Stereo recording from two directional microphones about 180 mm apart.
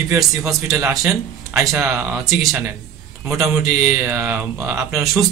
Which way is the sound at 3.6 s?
Centre (ahead or behind).